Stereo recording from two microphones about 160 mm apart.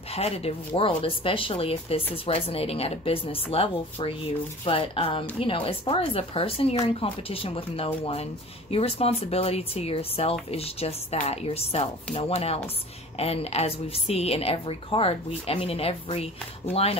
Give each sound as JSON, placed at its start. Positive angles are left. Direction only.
{"t": 0.1, "sound": "speech", "side_deg": 40}